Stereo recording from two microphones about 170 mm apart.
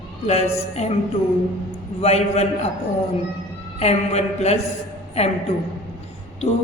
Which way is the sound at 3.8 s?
40° left (ahead or behind).